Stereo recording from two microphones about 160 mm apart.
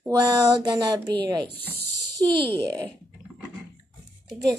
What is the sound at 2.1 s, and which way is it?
Speech, 30° right (ahead or behind).